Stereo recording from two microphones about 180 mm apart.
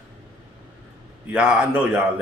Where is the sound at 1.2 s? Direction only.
10° right (ahead or behind).